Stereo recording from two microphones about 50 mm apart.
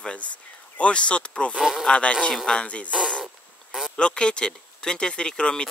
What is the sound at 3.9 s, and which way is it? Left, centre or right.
Speech, centre.